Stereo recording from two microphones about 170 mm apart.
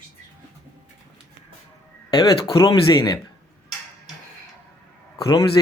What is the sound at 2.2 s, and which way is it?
Speech, 30° left (ahead or behind).